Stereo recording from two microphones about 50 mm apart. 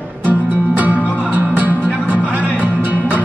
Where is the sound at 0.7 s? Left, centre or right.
Right.